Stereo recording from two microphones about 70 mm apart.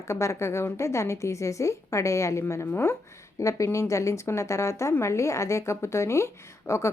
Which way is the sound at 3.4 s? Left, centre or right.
Left.